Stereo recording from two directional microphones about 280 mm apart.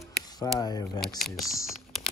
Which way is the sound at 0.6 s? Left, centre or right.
Centre.